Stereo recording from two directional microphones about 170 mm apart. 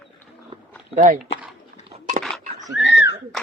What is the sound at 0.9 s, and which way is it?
Speech, 50° right (ahead or behind).